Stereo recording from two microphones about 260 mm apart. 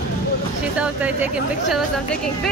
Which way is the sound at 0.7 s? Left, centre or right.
Centre.